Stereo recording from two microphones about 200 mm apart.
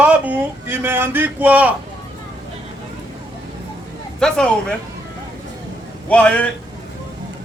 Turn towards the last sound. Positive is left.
turn(degrees=5)  # may be behind; listen again after turning